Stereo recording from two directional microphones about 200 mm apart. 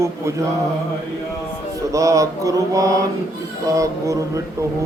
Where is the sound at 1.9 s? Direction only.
15° right (ahead or behind).